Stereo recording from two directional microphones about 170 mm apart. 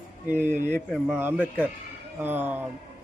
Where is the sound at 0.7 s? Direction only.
5° left (ahead or behind).